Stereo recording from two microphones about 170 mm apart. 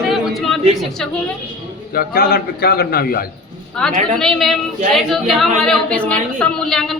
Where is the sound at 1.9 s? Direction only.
60° left (ahead or behind).